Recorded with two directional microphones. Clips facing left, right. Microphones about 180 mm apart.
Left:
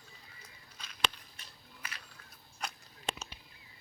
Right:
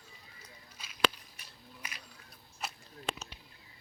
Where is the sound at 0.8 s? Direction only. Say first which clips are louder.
Right 6 dB; 5° right (ahead or behind).